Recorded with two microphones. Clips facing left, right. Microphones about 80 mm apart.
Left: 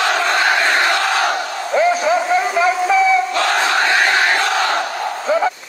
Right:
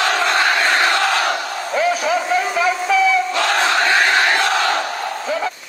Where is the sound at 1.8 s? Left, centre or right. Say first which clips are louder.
Left 3 dB; left.